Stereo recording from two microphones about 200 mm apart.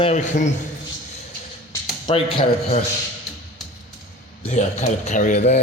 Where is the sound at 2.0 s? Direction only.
25° left (ahead or behind).